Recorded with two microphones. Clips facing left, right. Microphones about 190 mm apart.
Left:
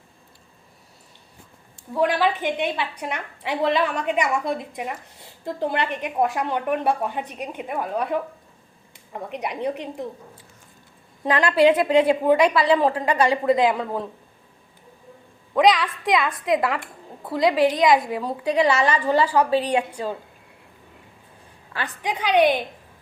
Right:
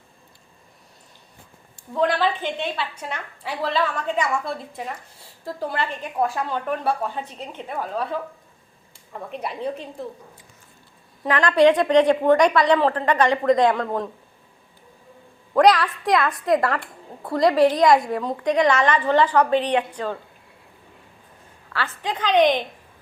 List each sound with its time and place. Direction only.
1.9 s a woman's voice: 10° left (ahead or behind)
11.2 s a woman's voice: 15° left (ahead or behind)
15.5 s a woman's voice: centre (ahead or behind)
21.7 s a woman's voice: 15° left (ahead or behind)